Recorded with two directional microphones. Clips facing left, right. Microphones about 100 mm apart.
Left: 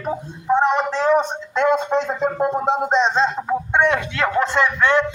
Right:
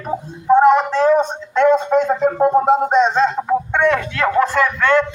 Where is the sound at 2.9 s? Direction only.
20° left (ahead or behind).